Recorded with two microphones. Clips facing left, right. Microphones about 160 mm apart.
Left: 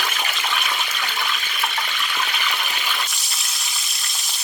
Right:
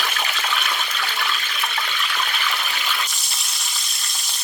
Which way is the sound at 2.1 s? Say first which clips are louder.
Left 1 dB; 10° left (ahead or behind).